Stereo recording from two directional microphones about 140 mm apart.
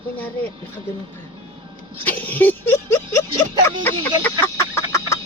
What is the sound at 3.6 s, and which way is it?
Chicken, 15° left (ahead or behind).